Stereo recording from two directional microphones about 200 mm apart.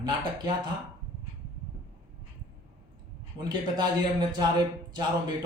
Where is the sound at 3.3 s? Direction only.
20° right (ahead or behind).